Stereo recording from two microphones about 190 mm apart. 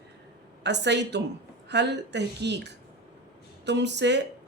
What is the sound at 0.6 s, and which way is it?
A woman's voice, 65° right (ahead or behind).